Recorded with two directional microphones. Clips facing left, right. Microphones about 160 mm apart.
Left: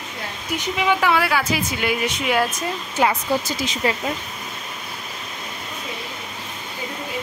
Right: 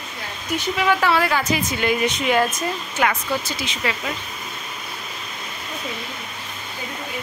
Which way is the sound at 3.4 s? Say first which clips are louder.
Left 3 dB; 40° left (ahead or behind).